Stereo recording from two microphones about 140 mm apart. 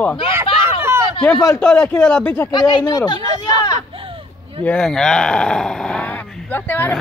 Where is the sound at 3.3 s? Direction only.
25° left (ahead or behind).